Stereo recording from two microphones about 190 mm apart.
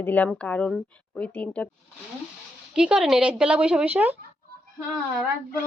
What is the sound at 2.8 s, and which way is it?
A woman's voice, 5° right (ahead or behind).